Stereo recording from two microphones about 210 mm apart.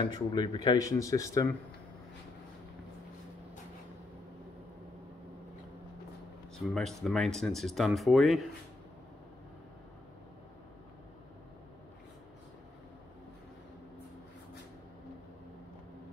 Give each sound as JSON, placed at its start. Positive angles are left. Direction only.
{"t": 0.0, "sound": "speech", "side_deg": 20}
{"t": 6.6, "sound": "speech", "side_deg": 0}